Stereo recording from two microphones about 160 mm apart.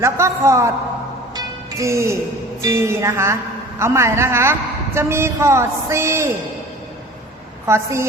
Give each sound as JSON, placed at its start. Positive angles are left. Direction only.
{"t": 0.0, "sound": "a woman's voice", "side_deg": -15}
{"t": 1.4, "sound": "music", "side_deg": -20}
{"t": 2.6, "sound": "a woman's voice", "side_deg": -20}
{"t": 7.7, "sound": "a woman's voice", "side_deg": -15}